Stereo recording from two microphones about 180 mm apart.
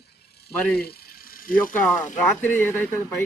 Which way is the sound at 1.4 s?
50° left (ahead or behind).